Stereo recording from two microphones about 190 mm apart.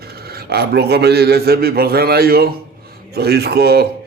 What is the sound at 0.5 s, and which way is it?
Speech, 60° right (ahead or behind).